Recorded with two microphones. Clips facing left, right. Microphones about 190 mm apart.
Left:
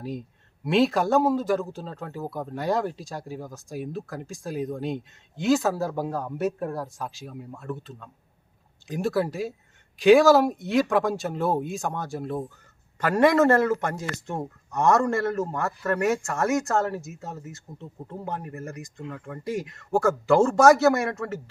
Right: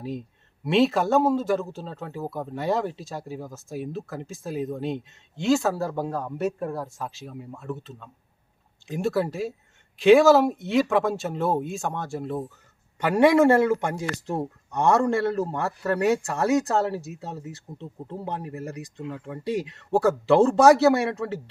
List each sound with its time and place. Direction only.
0.0 s speech: centre (ahead or behind)
13.0 s a man's voice: 15° right (ahead or behind)
13.9 s speech: 35° right (ahead or behind)
15.0 s a man's voice: 15° right (ahead or behind)
16.4 s speech: 35° right (ahead or behind)
17.4 s speech: 20° right (ahead or behind)
18.9 s a man's voice: 5° right (ahead or behind)
20.6 s speech: 30° right (ahead or behind)